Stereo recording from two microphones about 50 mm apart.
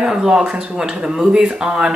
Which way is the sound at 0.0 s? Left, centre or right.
Centre.